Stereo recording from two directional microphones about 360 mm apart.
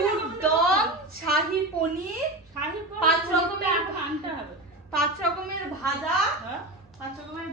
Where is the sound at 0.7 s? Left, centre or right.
Right.